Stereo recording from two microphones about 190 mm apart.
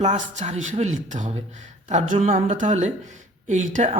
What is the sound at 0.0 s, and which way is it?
Speech, 40° right (ahead or behind).